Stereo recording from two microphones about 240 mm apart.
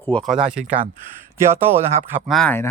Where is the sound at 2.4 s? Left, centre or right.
Centre.